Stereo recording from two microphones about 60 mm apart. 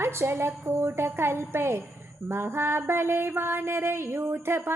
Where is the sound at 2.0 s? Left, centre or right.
Right.